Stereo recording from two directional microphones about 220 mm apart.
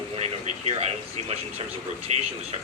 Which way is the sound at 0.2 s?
30° right (ahead or behind).